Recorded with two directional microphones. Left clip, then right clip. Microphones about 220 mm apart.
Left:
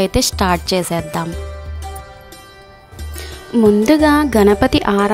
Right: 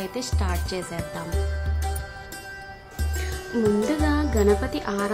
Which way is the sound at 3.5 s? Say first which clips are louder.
Left 10 dB; 25° left (ahead or behind).